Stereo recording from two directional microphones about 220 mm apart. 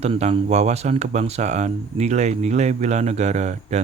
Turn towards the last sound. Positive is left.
turn(degrees=-30)  # may be behind; listen again after turning